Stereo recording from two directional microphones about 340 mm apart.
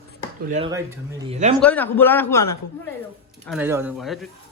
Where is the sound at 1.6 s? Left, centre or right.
Centre.